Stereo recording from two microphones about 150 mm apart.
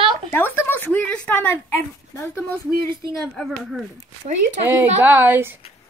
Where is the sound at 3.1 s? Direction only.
Centre (ahead or behind).